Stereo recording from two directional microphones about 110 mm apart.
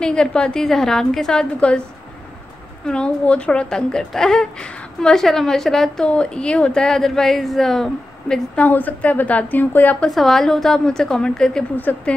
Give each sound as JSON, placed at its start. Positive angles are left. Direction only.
{"t": 0.0, "sound": "a woman's voice", "side_deg": 5}
{"t": 2.9, "sound": "a woman's voice", "side_deg": 10}
{"t": 10.0, "sound": "a woman's voice", "side_deg": 5}